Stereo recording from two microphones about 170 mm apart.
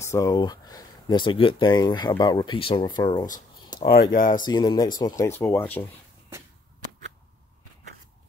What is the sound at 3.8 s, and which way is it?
Speech, 65° left (ahead or behind).